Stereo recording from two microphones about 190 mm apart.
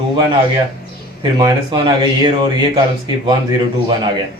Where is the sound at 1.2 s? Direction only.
25° right (ahead or behind).